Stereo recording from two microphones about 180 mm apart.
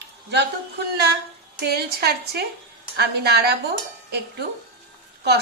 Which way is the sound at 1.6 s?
60° right (ahead or behind).